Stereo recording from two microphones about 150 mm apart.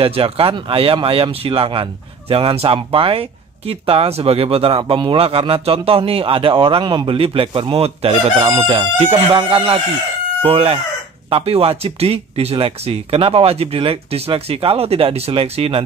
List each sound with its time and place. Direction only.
0.0 s speech: 40° right (ahead or behind)